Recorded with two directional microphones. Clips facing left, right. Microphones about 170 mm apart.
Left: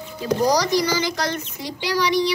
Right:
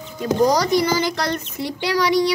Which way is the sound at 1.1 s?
60° right (ahead or behind).